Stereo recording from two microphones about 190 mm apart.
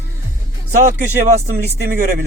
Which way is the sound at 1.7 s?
50° right (ahead or behind).